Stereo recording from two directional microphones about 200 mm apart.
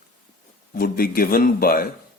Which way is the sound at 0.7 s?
45° left (ahead or behind).